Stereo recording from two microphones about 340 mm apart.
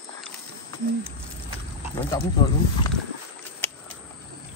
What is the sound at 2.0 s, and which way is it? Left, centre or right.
Speech, centre.